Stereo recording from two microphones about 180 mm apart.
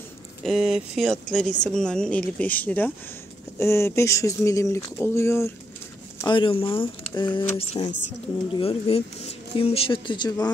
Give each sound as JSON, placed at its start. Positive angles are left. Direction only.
{"t": 0.5, "sound": "speech", "side_deg": -5}
{"t": 6.2, "sound": "speech", "side_deg": 30}